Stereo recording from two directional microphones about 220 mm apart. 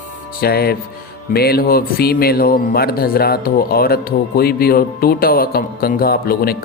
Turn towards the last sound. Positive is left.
turn(degrees=45)  # may be behind; listen again after turning